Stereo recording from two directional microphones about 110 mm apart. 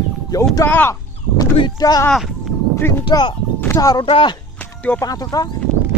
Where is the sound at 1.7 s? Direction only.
35° left (ahead or behind).